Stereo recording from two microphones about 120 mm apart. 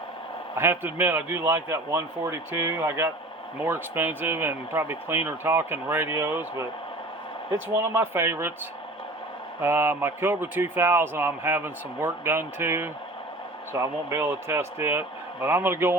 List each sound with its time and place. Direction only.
0.5 s a man's voice: 20° right (ahead or behind)
7.9 s a man's voice: 20° right (ahead or behind)
9.6 s a man's voice: 20° right (ahead or behind)